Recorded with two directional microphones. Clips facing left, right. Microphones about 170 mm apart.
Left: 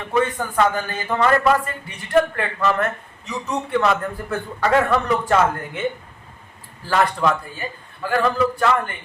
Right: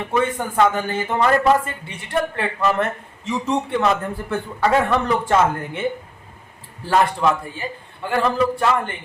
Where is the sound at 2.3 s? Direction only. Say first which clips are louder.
Right 1 dB; 25° right (ahead or behind).